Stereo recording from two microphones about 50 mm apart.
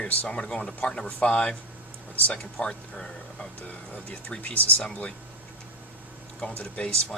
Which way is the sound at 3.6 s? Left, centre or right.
Left.